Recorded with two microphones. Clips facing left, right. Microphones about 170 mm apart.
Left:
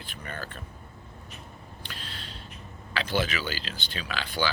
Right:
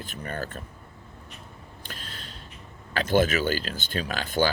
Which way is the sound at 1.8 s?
45° right (ahead or behind).